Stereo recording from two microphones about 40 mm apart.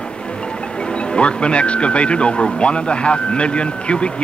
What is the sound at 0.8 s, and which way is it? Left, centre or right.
Speech, left.